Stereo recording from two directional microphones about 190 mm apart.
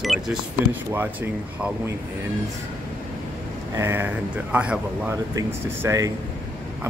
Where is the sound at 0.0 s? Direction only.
Centre (ahead or behind).